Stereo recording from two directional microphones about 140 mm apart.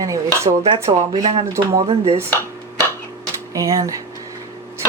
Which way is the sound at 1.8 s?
45° right (ahead or behind).